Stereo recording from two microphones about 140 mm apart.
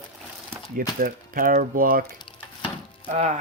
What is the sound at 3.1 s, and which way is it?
Speech, 50° right (ahead or behind).